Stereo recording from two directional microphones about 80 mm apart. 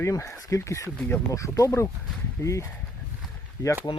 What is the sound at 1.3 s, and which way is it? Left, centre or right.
Speech, left.